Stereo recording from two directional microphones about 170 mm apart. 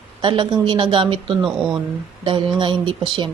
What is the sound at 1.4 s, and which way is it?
Speech, centre (ahead or behind).